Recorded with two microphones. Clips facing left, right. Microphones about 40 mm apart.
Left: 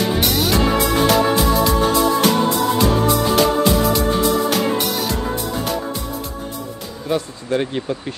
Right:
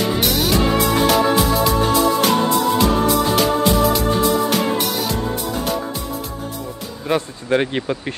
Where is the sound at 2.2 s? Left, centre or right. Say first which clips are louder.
Even; centre.